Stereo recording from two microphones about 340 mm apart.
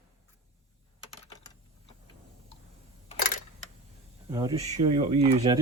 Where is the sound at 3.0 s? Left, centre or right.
Left.